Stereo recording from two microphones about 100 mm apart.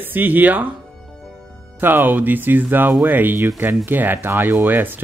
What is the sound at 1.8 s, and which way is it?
Speech, 20° right (ahead or behind).